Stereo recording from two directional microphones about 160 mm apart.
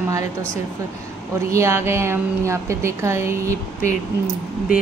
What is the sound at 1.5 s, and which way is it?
Speech, 15° right (ahead or behind).